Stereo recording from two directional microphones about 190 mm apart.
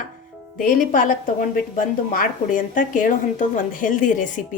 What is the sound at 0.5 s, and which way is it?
A woman's voice, 45° left (ahead or behind).